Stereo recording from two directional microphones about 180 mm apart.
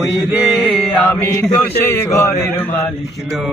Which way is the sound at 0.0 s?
Centre (ahead or behind).